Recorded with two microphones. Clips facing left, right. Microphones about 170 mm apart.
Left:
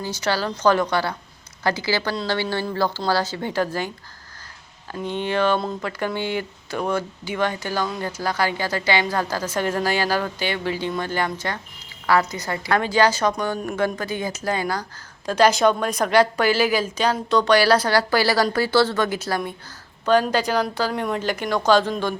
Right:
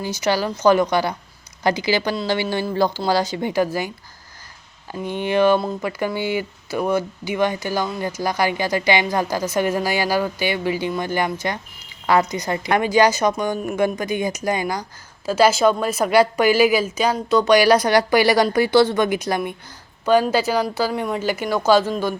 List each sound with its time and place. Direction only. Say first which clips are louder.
0.0 s speech: right 3 dB; 15° right (ahead or behind)
15.3 s speech: right 1 dB; 5° right (ahead or behind)